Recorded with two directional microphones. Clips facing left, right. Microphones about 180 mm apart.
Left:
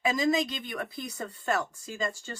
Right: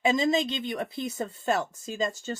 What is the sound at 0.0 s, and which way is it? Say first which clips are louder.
Speech: right 2 dB; 25° right (ahead or behind).